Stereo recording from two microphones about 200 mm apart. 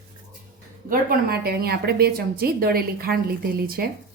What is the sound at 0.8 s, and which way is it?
A woman's voice, 50° right (ahead or behind).